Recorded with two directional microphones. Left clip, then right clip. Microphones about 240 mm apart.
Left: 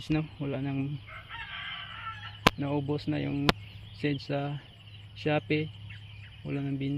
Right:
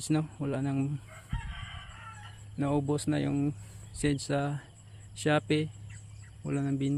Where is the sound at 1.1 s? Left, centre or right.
Left.